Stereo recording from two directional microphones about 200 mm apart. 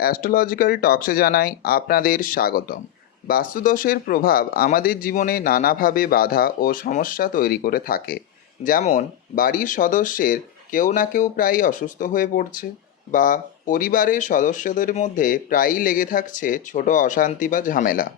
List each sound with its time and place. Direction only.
0.0 s speech: 45° left (ahead or behind)